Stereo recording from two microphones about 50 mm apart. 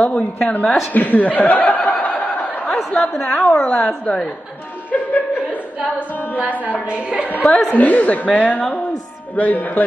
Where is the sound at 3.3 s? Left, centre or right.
Left.